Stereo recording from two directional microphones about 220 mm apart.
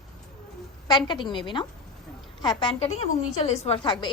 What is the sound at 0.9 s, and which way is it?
A woman's voice, 20° left (ahead or behind).